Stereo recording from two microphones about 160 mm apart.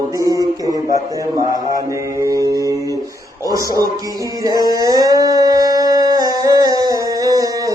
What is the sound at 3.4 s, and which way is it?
Speech, 20° right (ahead or behind).